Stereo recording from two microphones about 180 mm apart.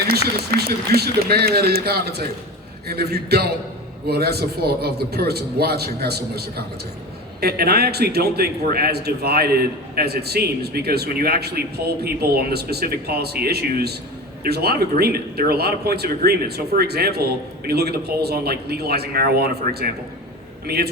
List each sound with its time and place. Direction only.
0.1 s a man's voice: 60° right (ahead or behind)